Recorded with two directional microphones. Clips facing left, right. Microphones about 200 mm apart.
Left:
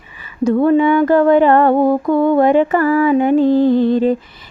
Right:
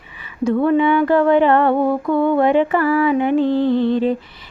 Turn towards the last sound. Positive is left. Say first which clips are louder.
# left 3 dB
turn(degrees=40)  # may be behind; listen again after turning